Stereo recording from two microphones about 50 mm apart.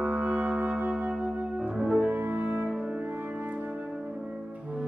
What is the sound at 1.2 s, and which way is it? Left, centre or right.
Music, right.